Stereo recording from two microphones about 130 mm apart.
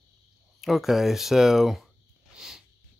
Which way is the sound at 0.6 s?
Centre (ahead or behind).